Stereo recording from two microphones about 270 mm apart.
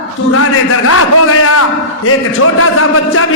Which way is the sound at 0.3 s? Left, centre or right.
Left.